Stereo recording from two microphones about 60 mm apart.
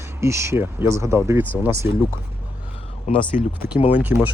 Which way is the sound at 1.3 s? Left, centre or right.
Right.